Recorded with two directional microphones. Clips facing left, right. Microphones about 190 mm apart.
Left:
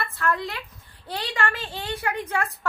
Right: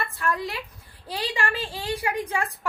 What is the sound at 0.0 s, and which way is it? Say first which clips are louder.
A woman's voice: left 1 dB; 15° right (ahead or behind).